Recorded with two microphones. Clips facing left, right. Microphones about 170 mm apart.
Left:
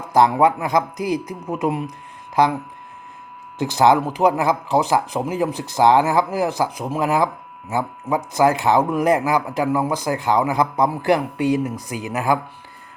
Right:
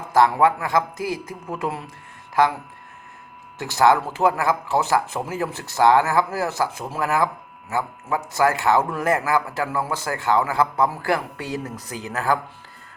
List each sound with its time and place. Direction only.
0.1 s speech: 20° left (ahead or behind)
3.6 s speech: 20° left (ahead or behind)